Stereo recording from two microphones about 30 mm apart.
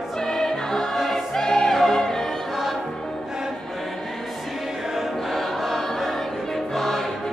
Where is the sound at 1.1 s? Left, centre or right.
Centre.